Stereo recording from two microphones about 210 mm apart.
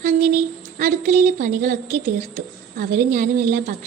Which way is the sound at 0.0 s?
35° right (ahead or behind).